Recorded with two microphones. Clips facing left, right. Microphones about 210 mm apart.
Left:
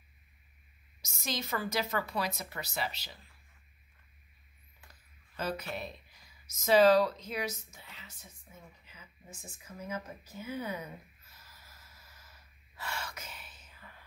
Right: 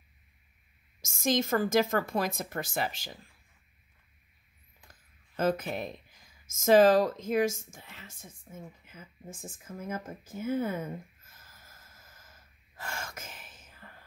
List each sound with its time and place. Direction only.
1.0 s a woman's voice: 50° right (ahead or behind)
5.3 s a woman's voice: 50° right (ahead or behind)